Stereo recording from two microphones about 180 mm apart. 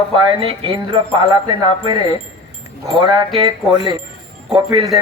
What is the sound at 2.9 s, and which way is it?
Speech, 25° right (ahead or behind).